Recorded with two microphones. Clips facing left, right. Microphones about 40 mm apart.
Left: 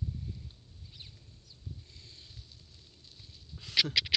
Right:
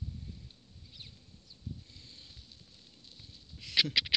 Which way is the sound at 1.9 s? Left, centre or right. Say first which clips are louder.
Even; right.